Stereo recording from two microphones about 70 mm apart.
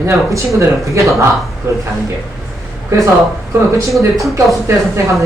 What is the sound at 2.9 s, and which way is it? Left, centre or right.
Speech, right.